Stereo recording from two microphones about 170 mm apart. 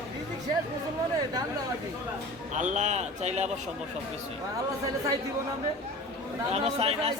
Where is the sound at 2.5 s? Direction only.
45° right (ahead or behind).